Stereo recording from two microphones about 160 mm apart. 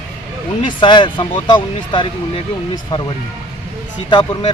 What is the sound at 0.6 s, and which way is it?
Speech, 30° left (ahead or behind).